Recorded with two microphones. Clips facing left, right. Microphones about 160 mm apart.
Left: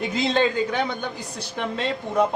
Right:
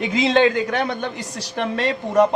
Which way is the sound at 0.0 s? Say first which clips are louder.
Right 5 dB; 85° right.